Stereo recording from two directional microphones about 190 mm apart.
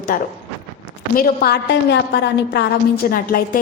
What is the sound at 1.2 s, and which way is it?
A woman's voice, 60° left (ahead or behind).